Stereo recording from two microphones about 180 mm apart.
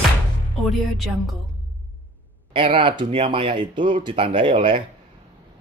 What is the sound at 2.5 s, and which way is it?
Speech, 30° right (ahead or behind).